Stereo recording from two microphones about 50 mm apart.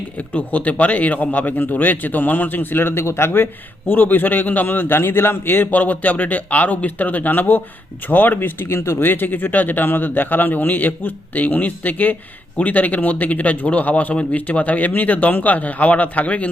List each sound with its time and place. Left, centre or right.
0.2 s speech: left
9.0 s speech: left